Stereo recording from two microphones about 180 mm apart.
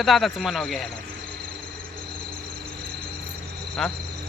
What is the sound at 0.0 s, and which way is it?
Speech, centre (ahead or behind).